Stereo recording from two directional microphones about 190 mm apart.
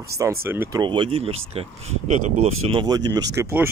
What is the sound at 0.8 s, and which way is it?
Speech, 25° right (ahead or behind).